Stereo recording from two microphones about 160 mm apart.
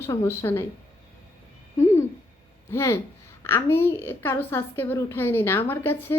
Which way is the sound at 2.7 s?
15° left (ahead or behind).